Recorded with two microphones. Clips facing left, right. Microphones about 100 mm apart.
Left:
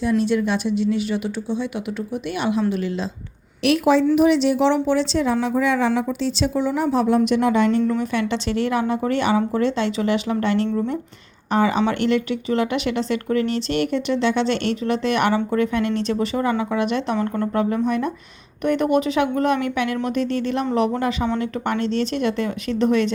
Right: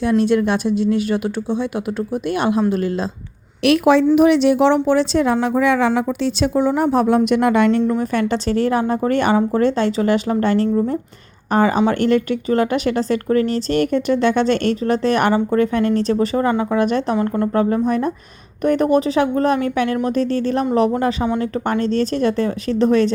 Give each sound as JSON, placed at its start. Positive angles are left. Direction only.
{"t": 0.0, "sound": "speech", "side_deg": -60}
{"t": 2.3, "sound": "speech", "side_deg": -45}
{"t": 3.6, "sound": "a woman's voice", "side_deg": -65}
{"t": 6.5, "sound": "a woman's voice", "side_deg": -50}
{"t": 7.9, "sound": "speech", "side_deg": -45}